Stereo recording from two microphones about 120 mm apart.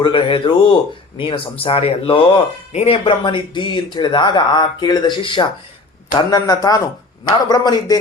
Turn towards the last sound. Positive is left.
turn(degrees=35)  # may be behind; listen again after turning